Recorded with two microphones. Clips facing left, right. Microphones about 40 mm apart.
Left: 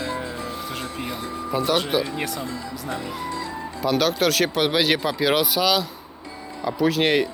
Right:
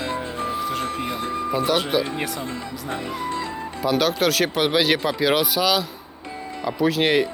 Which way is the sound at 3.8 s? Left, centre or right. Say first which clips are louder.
Even; centre.